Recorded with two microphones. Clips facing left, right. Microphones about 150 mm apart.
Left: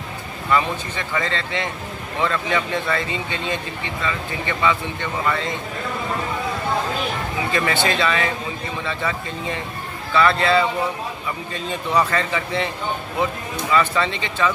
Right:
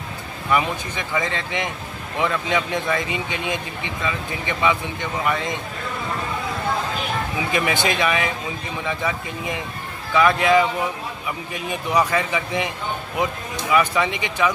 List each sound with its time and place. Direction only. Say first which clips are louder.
0.5 s speech: left 1 dB; 15° right (ahead or behind)
7.5 s speech: even; 15° right (ahead or behind)